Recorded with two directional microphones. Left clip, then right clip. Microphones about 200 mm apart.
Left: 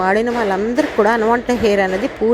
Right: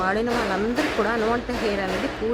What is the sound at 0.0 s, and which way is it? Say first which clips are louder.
A woman's voice: left 7 dB; 25° left (ahead or behind).